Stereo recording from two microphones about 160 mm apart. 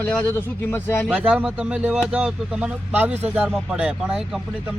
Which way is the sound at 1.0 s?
5° right (ahead or behind).